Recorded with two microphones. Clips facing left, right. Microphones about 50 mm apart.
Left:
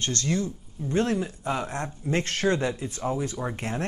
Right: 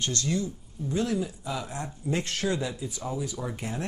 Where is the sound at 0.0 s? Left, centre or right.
Left.